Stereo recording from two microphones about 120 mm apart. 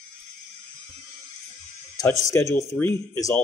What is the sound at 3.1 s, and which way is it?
Speech, 30° left (ahead or behind).